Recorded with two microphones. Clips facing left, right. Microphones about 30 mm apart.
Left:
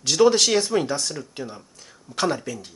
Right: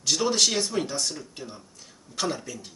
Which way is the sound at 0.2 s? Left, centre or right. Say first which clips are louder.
Left 9 dB; centre.